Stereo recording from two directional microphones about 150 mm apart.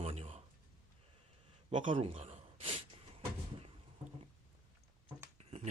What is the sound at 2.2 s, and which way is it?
Gasp, 40° right (ahead or behind).